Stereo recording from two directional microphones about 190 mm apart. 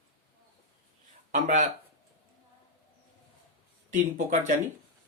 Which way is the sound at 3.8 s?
40° right (ahead or behind).